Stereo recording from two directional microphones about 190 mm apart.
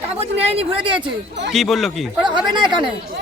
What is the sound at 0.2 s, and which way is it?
Speech, 30° right (ahead or behind).